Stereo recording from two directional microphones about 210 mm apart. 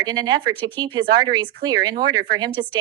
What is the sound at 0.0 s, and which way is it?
A woman's voice, 20° right (ahead or behind).